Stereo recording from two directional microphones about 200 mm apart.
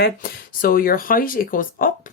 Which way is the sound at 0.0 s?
50° left (ahead or behind).